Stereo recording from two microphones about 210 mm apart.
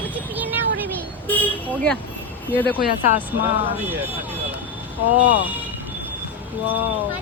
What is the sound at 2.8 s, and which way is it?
Speech, 45° left (ahead or behind).